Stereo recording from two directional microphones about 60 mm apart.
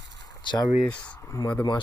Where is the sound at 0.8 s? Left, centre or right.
Left.